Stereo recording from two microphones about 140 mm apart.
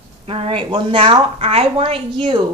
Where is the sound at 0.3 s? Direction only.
40° right (ahead or behind).